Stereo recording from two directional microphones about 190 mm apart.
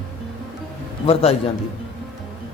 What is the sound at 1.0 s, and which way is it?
Speech, 30° left (ahead or behind).